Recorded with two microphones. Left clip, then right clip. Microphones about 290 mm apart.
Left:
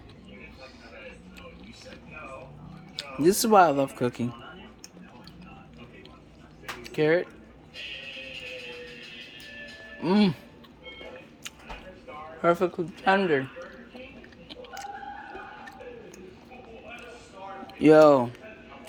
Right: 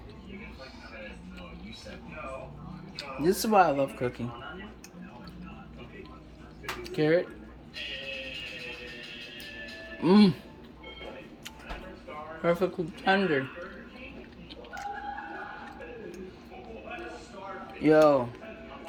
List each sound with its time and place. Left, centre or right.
2.9 s speech: left
6.8 s speech: centre
10.0 s speech: centre
12.4 s a man's voice: centre
17.8 s speech: left